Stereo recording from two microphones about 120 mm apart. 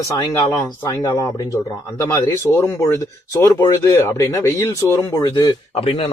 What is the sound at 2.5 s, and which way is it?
Speech, 20° left (ahead or behind).